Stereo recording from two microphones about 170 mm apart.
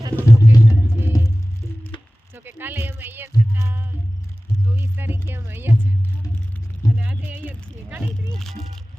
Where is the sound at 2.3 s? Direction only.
10° right (ahead or behind).